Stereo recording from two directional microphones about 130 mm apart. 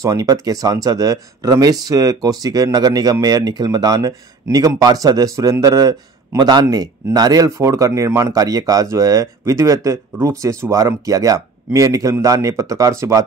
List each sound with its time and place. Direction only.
0.0 s speech: 25° right (ahead or behind)